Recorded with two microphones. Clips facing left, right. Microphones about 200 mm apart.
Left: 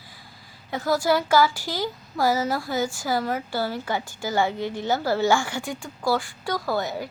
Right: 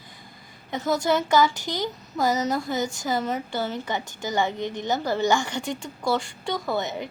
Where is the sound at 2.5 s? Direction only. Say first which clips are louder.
Even; 20° right (ahead or behind).